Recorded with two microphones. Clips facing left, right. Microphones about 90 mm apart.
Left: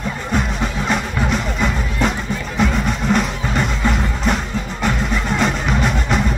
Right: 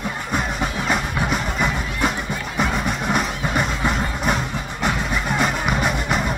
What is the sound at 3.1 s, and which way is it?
Music, 10° right (ahead or behind).